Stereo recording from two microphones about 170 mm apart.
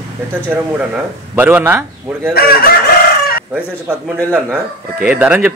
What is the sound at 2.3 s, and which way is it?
Chicken, 65° left (ahead or behind).